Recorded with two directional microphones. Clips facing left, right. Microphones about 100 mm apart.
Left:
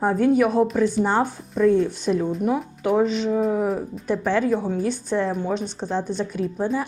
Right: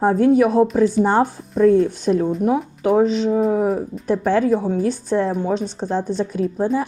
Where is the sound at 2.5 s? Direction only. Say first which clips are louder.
Right 4 dB; 30° right (ahead or behind).